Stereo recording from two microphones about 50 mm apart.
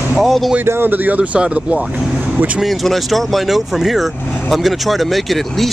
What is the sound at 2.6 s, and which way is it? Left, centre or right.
Speech, centre.